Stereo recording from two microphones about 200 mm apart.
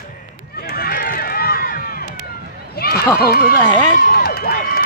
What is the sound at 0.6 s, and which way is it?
Run, 50° left (ahead or behind).